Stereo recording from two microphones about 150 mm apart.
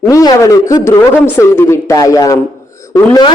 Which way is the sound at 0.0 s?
25° left (ahead or behind).